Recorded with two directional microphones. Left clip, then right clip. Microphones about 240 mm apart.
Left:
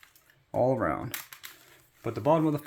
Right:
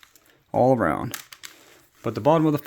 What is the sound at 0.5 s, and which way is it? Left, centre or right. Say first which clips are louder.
Speech: right 7 dB; right.